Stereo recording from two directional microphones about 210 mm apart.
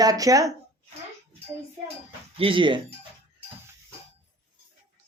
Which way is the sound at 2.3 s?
25° right (ahead or behind).